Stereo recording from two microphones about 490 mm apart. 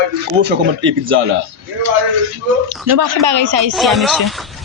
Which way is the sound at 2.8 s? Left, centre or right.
Right.